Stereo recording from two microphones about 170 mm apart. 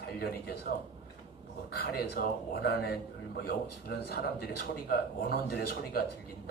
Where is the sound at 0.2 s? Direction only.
65° left (ahead or behind).